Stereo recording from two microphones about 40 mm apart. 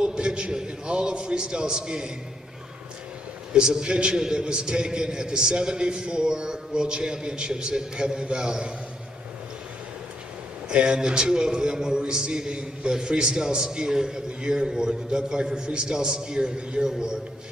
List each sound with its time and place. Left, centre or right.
0.0 s a man's voice: right
3.5 s a man's voice: right
10.7 s a man's voice: right